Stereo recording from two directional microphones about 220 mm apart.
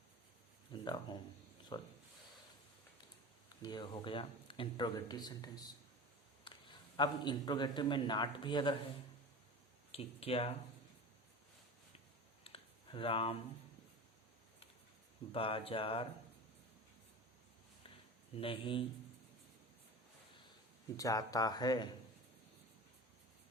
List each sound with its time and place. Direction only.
0.7 s a sound: 20° left (ahead or behind)
1.7 s speech: 20° left (ahead or behind)
3.6 s a man's voice: 20° left (ahead or behind)
9.9 s speech: 25° left (ahead or behind)
12.4 s a sound: 25° left (ahead or behind)
15.3 s speech: 25° left (ahead or behind)
18.3 s speech: 25° left (ahead or behind)
20.9 s speech: 15° left (ahead or behind)